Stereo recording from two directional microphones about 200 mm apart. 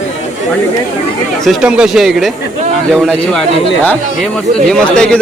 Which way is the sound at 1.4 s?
Centre (ahead or behind).